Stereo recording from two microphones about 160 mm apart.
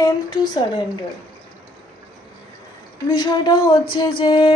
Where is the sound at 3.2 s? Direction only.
25° left (ahead or behind).